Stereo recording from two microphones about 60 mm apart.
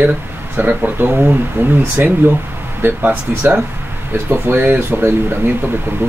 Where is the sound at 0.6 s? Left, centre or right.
Right.